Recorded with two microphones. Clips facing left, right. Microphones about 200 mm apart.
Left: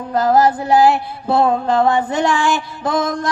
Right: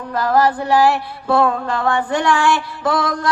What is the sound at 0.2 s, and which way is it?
Music, 20° left (ahead or behind).